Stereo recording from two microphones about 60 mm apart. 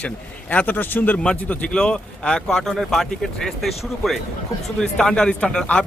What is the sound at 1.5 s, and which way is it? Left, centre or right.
Speech, centre.